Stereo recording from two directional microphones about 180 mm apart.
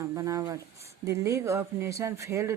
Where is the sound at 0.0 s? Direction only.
20° right (ahead or behind).